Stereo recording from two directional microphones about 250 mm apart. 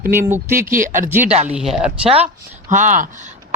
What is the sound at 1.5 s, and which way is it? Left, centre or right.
Speech, centre.